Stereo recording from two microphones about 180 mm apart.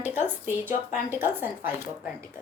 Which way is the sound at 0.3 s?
10° right (ahead or behind).